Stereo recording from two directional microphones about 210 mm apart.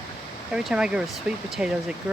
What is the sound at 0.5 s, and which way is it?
Speech, 5° right (ahead or behind).